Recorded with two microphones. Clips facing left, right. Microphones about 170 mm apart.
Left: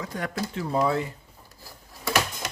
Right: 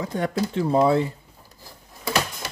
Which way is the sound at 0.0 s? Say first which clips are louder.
Right 6 dB; 30° right (ahead or behind).